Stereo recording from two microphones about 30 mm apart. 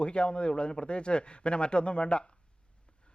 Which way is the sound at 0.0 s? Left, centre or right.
Left.